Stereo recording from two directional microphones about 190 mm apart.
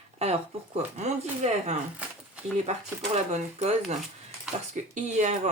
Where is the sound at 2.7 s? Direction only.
35° right (ahead or behind).